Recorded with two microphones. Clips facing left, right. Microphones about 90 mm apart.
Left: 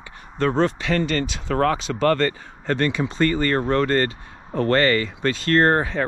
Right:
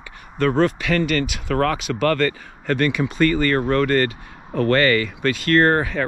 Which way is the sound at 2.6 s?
75° right (ahead or behind).